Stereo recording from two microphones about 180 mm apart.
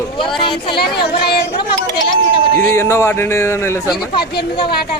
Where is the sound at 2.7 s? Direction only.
15° left (ahead or behind).